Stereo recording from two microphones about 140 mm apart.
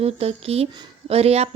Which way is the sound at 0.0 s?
45° right (ahead or behind).